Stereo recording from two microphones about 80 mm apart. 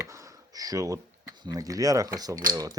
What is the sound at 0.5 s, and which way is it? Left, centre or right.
Speech, right.